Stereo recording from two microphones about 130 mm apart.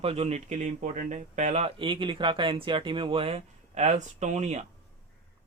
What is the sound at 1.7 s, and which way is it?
Speech, 40° right (ahead or behind).